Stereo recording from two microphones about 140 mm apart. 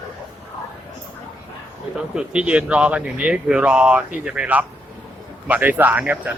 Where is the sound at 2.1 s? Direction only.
5° right (ahead or behind).